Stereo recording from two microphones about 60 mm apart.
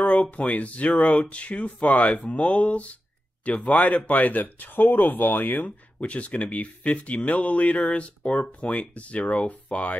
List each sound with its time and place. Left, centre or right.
0.0 s speech: centre